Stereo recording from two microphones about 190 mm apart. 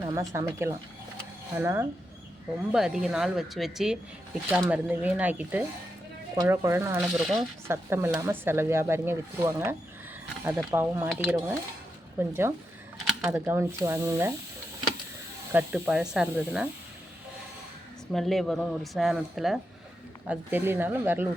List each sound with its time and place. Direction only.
0.0 s speech: 15° right (ahead or behind)
2.7 s a woman's voice: centre (ahead or behind)
7.2 s a woman's voice: centre (ahead or behind)
7.7 s speech: 15° right (ahead or behind)
15.5 s a woman's voice: 5° right (ahead or behind)
18.1 s a woman's voice: centre (ahead or behind)